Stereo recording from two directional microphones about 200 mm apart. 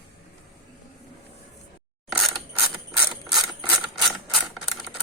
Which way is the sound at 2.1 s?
Centre (ahead or behind).